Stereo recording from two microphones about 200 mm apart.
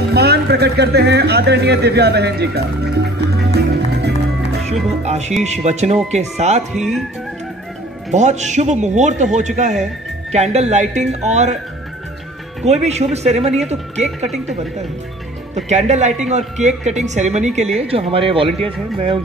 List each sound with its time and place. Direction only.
0.1 s speech: 55° right (ahead or behind)
5.0 s music: 35° right (ahead or behind)
5.4 s a woman's voice: 35° right (ahead or behind)
6.7 s speech: centre (ahead or behind)
8.1 s a woman's voice: 35° right (ahead or behind)
12.6 s a woman's voice: 35° right (ahead or behind)
15.5 s a woman's voice: 35° right (ahead or behind)